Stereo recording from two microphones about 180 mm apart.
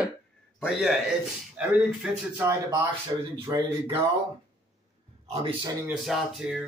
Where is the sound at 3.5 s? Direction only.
15° right (ahead or behind).